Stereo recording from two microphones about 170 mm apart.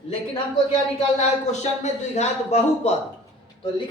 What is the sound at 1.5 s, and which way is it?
Speech, 40° left (ahead or behind).